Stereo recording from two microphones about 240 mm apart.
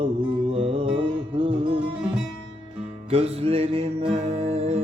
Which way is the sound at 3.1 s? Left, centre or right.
Right.